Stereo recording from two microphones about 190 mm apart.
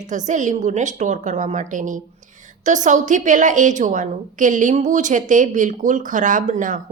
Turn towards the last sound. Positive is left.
turn(degrees=-40)  # may be behind; listen again after turning